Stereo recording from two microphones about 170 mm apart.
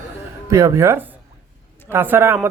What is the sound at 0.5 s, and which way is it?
Speech, 20° right (ahead or behind).